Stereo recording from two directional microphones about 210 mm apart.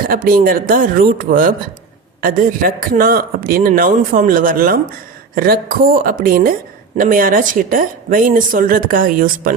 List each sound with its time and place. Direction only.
0.1 s a woman's voice: 40° right (ahead or behind)